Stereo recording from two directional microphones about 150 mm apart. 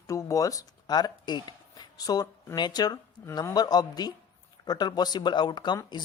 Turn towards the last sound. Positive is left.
turn(degrees=30)  # may be behind; listen again after turning